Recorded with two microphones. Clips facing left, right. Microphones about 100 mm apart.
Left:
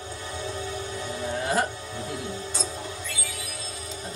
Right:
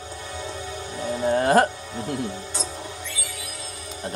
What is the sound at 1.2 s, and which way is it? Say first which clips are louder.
Music: right 8 dB; 55° right (ahead or behind).